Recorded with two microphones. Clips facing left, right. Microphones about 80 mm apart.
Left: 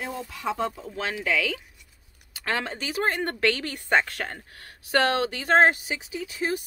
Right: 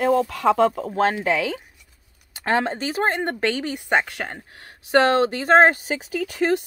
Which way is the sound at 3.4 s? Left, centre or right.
Centre.